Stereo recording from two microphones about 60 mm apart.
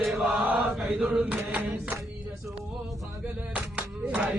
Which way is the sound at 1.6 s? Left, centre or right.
Right.